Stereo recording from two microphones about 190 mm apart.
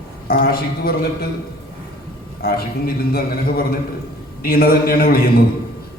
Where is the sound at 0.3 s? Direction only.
50° left (ahead or behind).